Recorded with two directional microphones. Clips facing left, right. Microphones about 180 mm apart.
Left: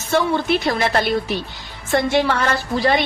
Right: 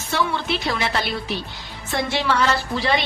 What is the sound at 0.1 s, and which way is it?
A woman's voice, 45° left (ahead or behind).